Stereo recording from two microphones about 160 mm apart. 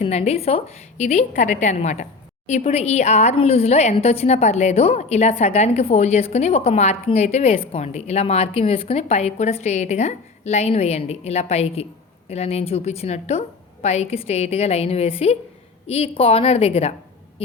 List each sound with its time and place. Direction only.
0.0 s a woman's voice: 40° left (ahead or behind)